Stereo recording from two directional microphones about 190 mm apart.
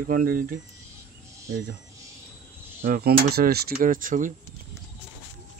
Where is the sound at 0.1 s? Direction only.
50° right (ahead or behind).